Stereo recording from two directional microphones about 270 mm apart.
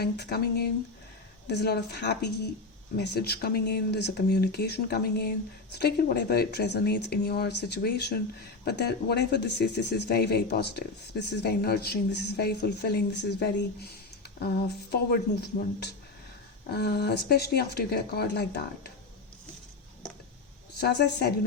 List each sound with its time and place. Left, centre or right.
0.0 s speech: left
20.7 s speech: left